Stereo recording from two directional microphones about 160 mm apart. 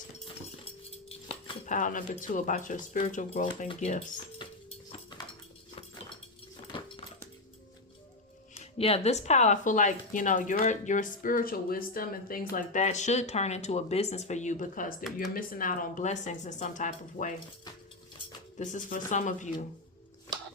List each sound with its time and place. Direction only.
0.6 s chink: 35° left (ahead or behind)
1.6 s speech: 50° left (ahead or behind)
8.5 s speech: 40° left (ahead or behind)
18.6 s speech: 50° left (ahead or behind)